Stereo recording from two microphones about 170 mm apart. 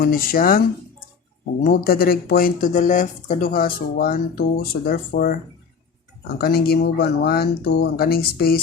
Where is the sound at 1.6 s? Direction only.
60° left (ahead or behind).